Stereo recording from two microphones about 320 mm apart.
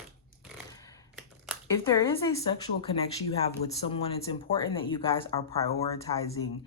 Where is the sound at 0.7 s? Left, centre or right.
Centre.